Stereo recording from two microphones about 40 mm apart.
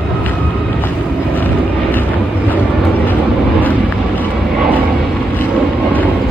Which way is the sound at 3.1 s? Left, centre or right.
Left.